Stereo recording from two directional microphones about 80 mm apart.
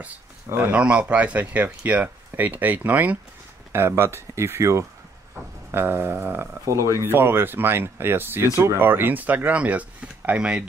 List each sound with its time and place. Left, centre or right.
0.7 s speech: centre
6.6 s speech: right
7.1 s speech: right